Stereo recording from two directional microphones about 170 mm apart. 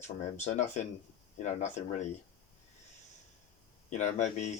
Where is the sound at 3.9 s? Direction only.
45° left (ahead or behind).